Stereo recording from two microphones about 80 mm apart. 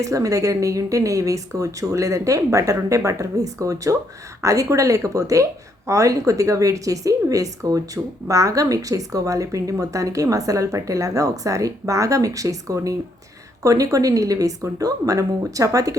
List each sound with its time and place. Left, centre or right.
0.0 s a woman's voice: right